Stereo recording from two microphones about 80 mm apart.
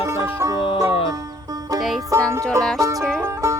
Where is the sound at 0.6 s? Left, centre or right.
Left.